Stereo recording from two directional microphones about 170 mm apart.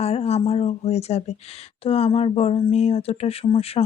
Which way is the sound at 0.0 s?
35° left (ahead or behind).